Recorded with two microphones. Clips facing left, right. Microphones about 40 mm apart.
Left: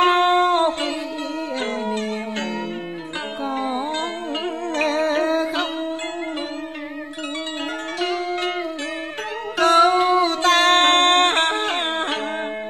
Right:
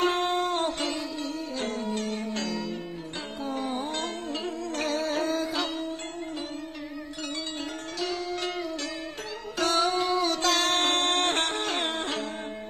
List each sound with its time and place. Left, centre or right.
0.0 s music: left
8.0 s music: left
9.6 s a sound: left